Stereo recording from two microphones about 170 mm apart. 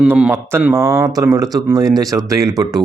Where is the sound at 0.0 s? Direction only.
10° right (ahead or behind).